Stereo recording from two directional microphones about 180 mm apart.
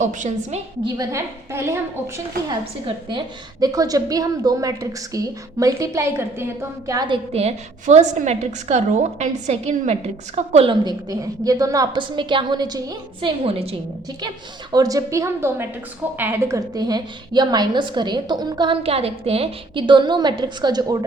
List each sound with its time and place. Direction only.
0.0 s a woman's voice: 45° right (ahead or behind)
0.9 s a woman's voice: 15° right (ahead or behind)
2.8 s a woman's voice: 25° right (ahead or behind)
7.3 s a woman's voice: 35° right (ahead or behind); by 13.3 s 20° right (ahead or behind)
13.4 s a woman's voice: 30° right (ahead or behind)
14.7 s a woman's voice: 20° right (ahead or behind)